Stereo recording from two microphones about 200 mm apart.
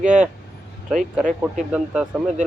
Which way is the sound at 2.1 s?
Centre (ahead or behind).